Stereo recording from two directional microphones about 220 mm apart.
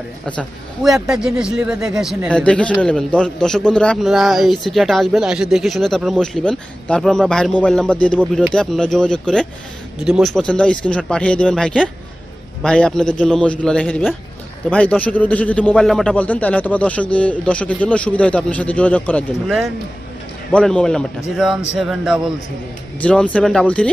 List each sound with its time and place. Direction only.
0.4 s a man's voice: centre (ahead or behind)